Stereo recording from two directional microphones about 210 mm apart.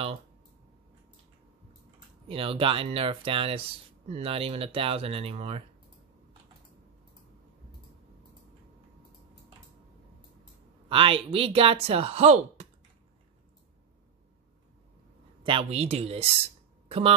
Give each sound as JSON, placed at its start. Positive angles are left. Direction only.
{"t": 2.2, "sound": "speech", "side_deg": -25}
{"t": 10.9, "sound": "speech", "side_deg": -25}
{"t": 15.4, "sound": "speech", "side_deg": -25}